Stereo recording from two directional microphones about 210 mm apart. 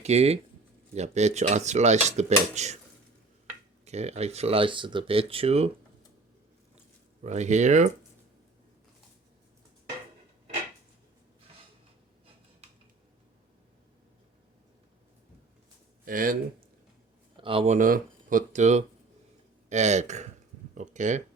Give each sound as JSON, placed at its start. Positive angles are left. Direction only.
{"t": 0.0, "sound": "speech", "side_deg": -30}
{"t": 3.8, "sound": "speech", "side_deg": -30}
{"t": 7.3, "sound": "speech", "side_deg": -35}
{"t": 16.0, "sound": "speech", "side_deg": -40}
{"t": 17.3, "sound": "speech", "side_deg": -25}
{"t": 17.7, "sound": "speech", "side_deg": -40}